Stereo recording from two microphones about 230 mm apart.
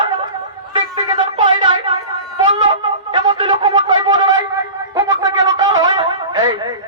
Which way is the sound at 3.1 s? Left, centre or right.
Centre.